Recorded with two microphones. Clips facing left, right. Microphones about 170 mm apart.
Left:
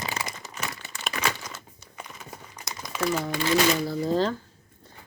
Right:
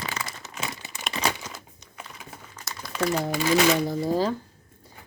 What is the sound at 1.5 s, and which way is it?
Crumpling, centre (ahead or behind).